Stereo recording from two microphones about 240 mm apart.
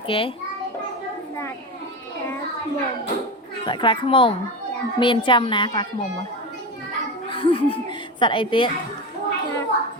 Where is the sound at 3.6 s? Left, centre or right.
Left.